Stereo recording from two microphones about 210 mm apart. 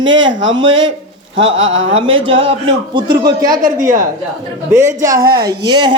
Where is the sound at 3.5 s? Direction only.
40° right (ahead or behind).